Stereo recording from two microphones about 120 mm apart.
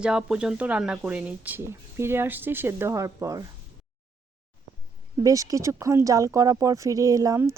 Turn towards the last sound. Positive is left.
turn(degrees=-25)  # may be behind; listen again after turning